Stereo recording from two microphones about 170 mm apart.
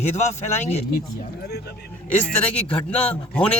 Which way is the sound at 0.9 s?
65° left (ahead or behind).